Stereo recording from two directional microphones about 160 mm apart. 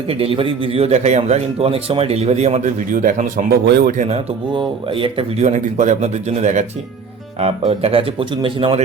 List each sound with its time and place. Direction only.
0.1 s speech: 35° right (ahead or behind); by 3.4 s 55° right (ahead or behind)
3.5 s speech: 80° right
4.5 s speech: 35° right (ahead or behind)
5.5 s speech: 45° right (ahead or behind)